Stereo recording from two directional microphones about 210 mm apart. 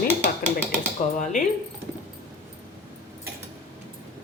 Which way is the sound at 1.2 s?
35° left (ahead or behind).